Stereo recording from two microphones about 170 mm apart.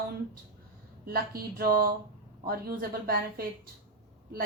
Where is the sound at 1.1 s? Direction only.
60° right (ahead or behind).